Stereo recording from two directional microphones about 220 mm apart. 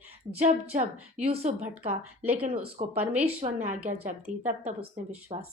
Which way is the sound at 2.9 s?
5° right (ahead or behind).